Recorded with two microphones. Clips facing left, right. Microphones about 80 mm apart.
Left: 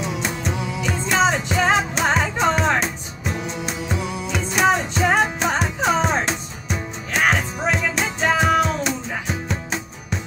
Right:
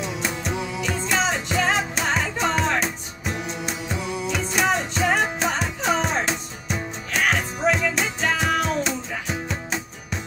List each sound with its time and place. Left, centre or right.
0.4 s music: centre
1.1 s music: centre